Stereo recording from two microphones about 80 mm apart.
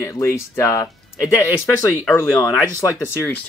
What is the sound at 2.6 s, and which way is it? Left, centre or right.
Speech, left.